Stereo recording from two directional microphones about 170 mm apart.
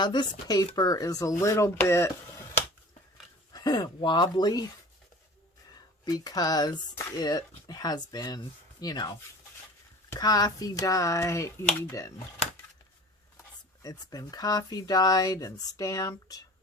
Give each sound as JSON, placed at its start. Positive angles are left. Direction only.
{"t": 0.0, "sound": "speech", "side_deg": 25}
{"t": 3.5, "sound": "speech", "side_deg": 25}
{"t": 6.1, "sound": "speech", "side_deg": 25}
{"t": 13.8, "sound": "speech", "side_deg": 20}